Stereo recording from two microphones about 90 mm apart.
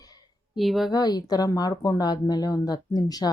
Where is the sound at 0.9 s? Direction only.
50° left (ahead or behind).